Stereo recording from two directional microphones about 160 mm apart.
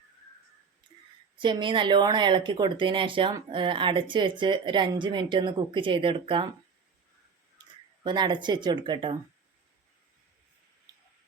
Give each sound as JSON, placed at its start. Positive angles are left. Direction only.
{"t": 1.4, "sound": "speech", "side_deg": -30}
{"t": 8.0, "sound": "speech", "side_deg": -30}
{"t": 10.9, "sound": "a sound", "side_deg": -25}